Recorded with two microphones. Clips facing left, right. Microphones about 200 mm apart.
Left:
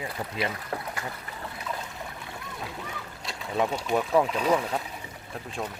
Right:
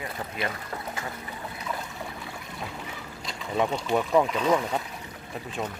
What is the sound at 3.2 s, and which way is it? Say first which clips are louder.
Speech: right 1 dB; centre (ahead or behind).